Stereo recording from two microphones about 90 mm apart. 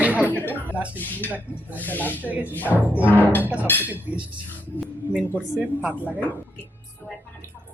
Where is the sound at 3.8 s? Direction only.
20° right (ahead or behind).